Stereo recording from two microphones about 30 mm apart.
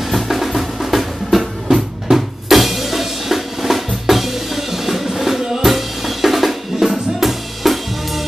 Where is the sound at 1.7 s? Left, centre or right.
Centre.